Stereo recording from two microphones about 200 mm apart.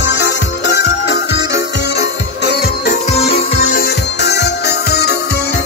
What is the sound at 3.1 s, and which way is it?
Music, 30° left (ahead or behind).